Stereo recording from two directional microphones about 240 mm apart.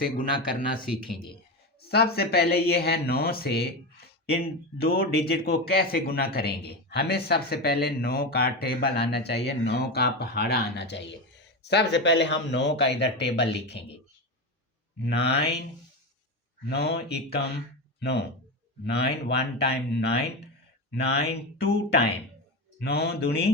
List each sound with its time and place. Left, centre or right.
0.9 s speech: centre
1.9 s speech: left
4.8 s speech: left
14.9 s speech: left
16.6 s speech: left